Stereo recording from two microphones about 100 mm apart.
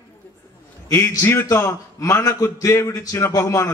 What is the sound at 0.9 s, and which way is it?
A man's voice, 25° left (ahead or behind).